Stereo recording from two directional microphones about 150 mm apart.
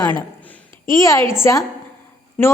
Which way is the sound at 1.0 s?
20° left (ahead or behind).